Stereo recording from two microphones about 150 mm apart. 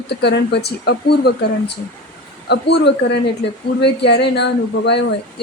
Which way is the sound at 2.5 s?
90° left.